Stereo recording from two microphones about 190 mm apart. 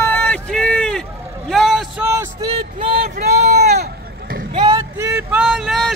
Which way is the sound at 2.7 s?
30° right (ahead or behind).